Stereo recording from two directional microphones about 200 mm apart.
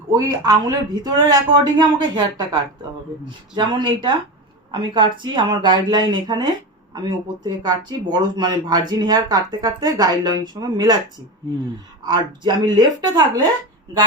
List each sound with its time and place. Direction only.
0.1 s speech: 20° right (ahead or behind)
12.0 s speech: 20° right (ahead or behind)